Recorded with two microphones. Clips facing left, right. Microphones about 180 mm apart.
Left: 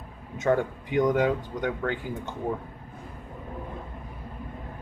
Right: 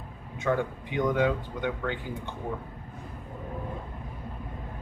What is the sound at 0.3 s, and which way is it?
Speech, 45° left (ahead or behind).